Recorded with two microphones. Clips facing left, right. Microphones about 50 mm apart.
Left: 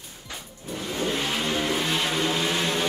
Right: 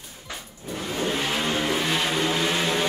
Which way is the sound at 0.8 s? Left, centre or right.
Centre.